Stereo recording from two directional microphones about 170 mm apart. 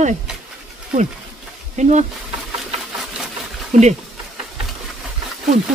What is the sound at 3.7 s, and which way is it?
Speech, 45° right (ahead or behind).